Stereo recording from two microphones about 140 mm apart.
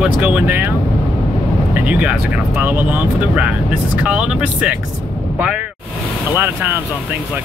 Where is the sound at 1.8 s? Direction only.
10° right (ahead or behind).